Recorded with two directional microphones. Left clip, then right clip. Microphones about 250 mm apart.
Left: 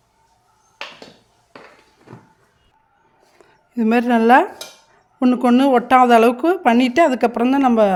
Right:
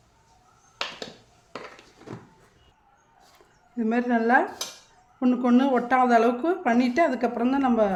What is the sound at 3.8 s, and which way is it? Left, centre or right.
Speech, left.